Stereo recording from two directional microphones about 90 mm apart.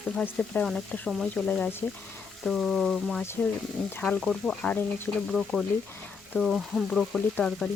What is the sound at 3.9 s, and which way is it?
Frying, 15° left (ahead or behind).